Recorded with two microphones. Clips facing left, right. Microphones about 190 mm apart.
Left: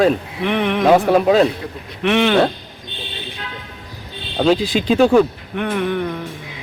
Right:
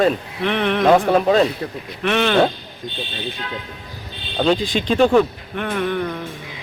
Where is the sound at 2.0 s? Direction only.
15° left (ahead or behind).